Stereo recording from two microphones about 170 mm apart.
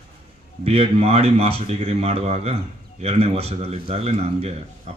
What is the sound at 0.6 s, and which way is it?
A man's voice, 35° right (ahead or behind).